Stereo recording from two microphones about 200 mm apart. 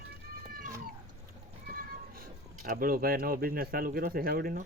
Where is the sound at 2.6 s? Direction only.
45° right (ahead or behind).